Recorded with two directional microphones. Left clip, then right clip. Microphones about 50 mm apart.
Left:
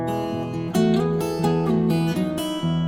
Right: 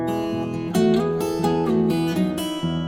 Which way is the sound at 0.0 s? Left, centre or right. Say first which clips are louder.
Right 1 dB; centre.